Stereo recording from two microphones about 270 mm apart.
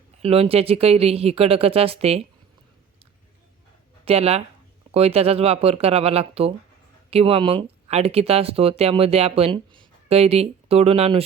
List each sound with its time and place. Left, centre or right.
0.2 s speech: right
4.0 s speech: right